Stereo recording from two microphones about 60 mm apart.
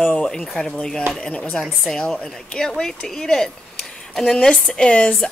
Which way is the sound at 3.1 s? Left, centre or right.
Centre.